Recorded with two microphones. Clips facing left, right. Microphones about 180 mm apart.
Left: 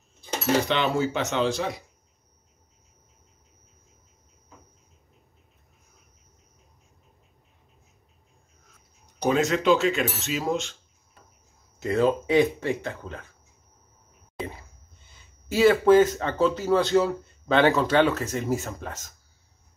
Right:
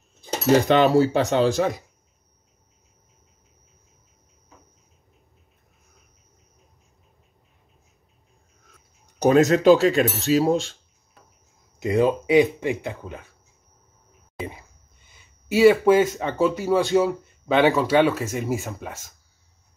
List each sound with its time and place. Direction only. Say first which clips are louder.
0.7 s speech: right 8 dB; 40° right (ahead or behind)
9.2 s speech: right 7 dB; 40° right (ahead or behind)
11.8 s speech: right 2 dB; 15° right (ahead or behind)
15.1 s speech: right 3 dB; 10° right (ahead or behind)